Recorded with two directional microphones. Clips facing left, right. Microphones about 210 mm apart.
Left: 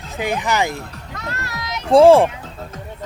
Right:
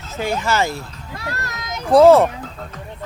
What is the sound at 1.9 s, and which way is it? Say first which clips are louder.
Speech: even; 30° left (ahead or behind).